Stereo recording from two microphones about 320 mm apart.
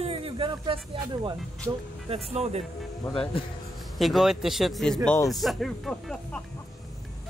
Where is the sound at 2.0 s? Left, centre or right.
Centre.